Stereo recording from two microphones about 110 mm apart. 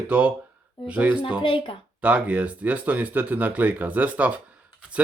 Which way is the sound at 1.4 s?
55° left (ahead or behind).